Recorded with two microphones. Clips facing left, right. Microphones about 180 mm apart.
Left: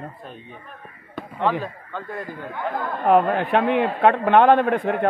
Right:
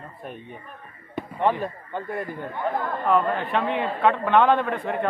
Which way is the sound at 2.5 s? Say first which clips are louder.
Even; centre (ahead or behind).